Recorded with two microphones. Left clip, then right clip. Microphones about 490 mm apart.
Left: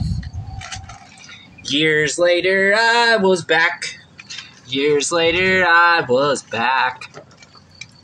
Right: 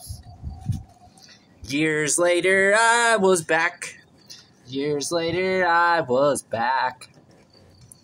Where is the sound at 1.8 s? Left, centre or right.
Right.